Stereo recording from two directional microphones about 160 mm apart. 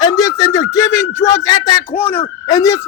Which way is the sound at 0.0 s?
20° left (ahead or behind).